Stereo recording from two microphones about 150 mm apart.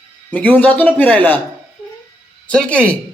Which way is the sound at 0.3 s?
10° left (ahead or behind).